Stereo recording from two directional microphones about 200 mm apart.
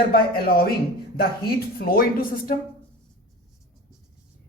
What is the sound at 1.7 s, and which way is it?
Speech, 45° left (ahead or behind).